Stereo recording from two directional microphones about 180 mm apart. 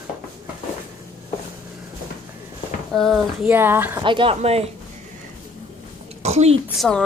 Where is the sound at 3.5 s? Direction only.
10° right (ahead or behind).